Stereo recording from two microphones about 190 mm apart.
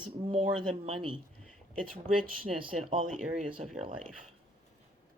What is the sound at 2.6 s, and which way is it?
Speech, 30° right (ahead or behind).